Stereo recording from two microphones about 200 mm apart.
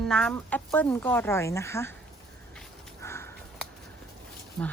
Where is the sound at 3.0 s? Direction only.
15° left (ahead or behind).